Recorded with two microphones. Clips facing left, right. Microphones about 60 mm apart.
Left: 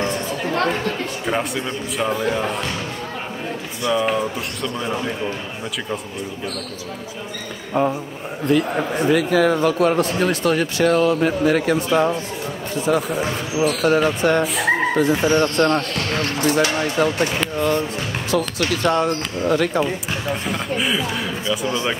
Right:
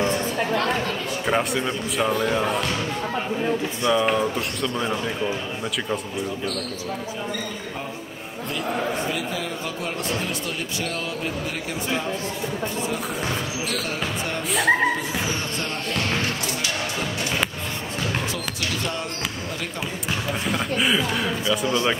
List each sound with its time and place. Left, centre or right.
1.2 s a man's voice: centre
3.9 s a man's voice: centre
9.1 s speech: left
13.8 s speech: left
14.4 s a man's voice: centre
15.0 s speech: left
16.4 s speech: left
20.4 s a man's voice: centre